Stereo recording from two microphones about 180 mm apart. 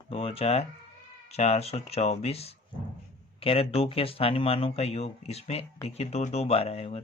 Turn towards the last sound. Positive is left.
turn(degrees=35)  # may be behind; listen again after turning